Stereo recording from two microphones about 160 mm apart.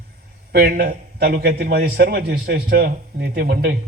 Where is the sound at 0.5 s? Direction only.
70° right (ahead or behind).